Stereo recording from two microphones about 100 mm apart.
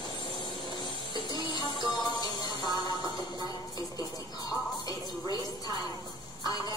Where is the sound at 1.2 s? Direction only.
45° left (ahead or behind).